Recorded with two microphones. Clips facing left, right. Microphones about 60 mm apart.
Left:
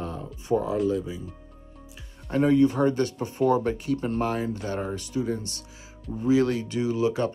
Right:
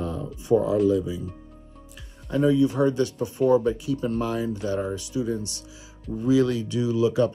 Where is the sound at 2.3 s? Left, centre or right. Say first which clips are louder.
Even; left.